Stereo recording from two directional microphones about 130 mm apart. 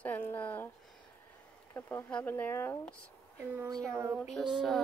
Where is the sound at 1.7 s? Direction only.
15° left (ahead or behind).